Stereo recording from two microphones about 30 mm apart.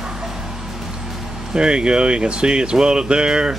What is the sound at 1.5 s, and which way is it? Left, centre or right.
Speech, right.